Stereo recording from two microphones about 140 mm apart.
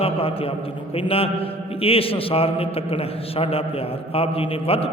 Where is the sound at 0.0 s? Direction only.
40° left (ahead or behind).